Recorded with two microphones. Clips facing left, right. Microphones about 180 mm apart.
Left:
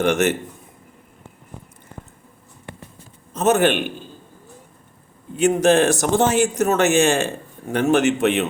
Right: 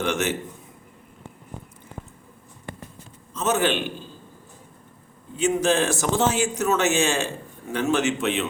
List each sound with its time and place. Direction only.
0.0 s a man's voice: 65° left (ahead or behind)
3.3 s a man's voice: 65° left (ahead or behind)
5.4 s a man's voice: 65° left (ahead or behind)